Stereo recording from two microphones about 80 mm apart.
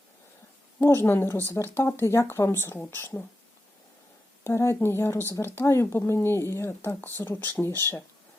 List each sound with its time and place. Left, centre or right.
0.8 s speech: left
4.4 s speech: left